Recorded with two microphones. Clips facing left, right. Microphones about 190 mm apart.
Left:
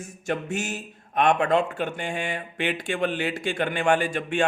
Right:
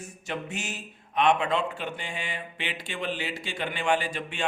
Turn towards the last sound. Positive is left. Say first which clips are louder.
# left 5 dB
turn(degrees=50)  # may be behind; listen again after turning